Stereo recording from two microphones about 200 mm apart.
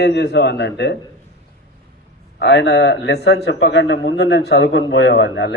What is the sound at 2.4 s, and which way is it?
A man's voice, 60° left (ahead or behind).